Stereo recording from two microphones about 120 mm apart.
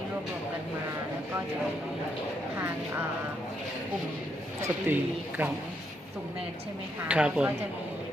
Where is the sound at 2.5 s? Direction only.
20° right (ahead or behind).